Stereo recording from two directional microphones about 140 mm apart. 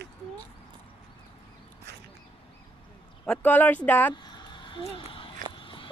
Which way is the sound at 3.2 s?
10° left (ahead or behind).